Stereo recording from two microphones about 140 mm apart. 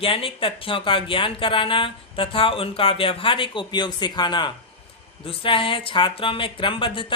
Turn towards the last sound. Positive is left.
turn(degrees=40)  # may be behind; listen again after turning